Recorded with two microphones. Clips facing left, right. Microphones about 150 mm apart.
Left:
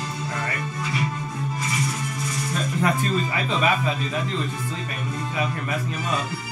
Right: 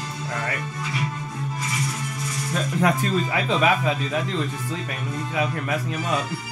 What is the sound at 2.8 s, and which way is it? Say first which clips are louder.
Speech: right 2 dB; 90° right.